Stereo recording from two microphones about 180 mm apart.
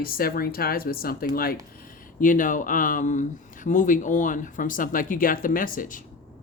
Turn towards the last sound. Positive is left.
turn(degrees=50)  # may be behind; listen again after turning